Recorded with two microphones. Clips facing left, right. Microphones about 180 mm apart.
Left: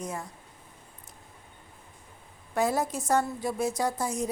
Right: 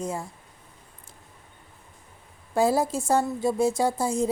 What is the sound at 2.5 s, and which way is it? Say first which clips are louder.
A woman's voice: right 5 dB; 30° right (ahead or behind).